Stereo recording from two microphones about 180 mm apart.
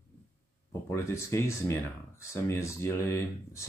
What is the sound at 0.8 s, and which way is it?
Speech, 15° left (ahead or behind).